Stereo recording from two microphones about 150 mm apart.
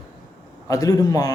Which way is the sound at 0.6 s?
25° left (ahead or behind).